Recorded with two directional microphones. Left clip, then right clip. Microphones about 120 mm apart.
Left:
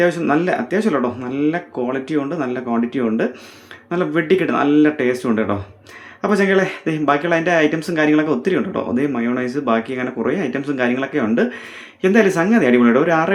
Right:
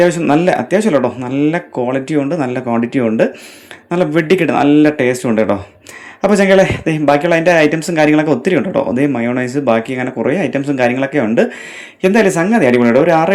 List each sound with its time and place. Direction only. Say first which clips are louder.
0.0 s a man's voice: right 5 dB; 25° right (ahead or behind)